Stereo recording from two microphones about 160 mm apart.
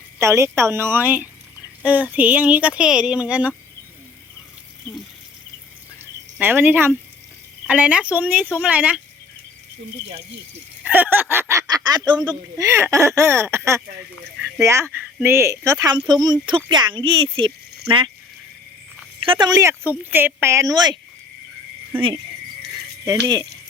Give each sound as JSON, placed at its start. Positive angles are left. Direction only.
{"t": 0.2, "sound": "speech", "side_deg": -15}
{"t": 6.4, "sound": "speech", "side_deg": -10}
{"t": 10.8, "sound": "speech", "side_deg": -10}
{"t": 19.2, "sound": "speech", "side_deg": -30}
{"t": 23.0, "sound": "speech", "side_deg": -20}